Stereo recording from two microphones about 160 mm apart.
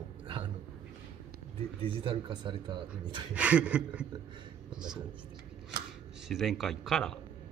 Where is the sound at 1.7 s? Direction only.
35° right (ahead or behind).